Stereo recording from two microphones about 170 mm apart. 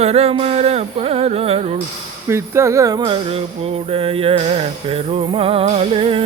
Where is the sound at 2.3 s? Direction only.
15° right (ahead or behind).